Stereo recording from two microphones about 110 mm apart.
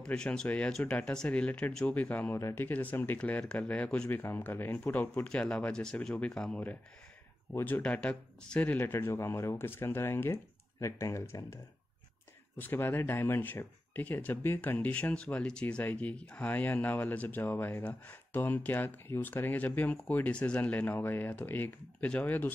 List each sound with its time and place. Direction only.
0.0 s speech: 5° left (ahead or behind)